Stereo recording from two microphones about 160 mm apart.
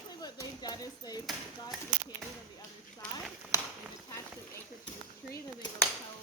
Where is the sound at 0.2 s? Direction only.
25° left (ahead or behind).